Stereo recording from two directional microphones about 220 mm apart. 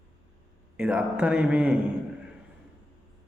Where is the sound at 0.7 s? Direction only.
5° right (ahead or behind).